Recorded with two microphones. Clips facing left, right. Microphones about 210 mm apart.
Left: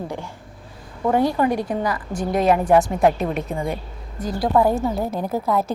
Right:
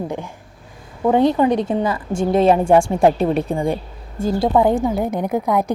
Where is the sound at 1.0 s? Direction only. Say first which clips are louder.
Right 4 dB; 20° right (ahead or behind).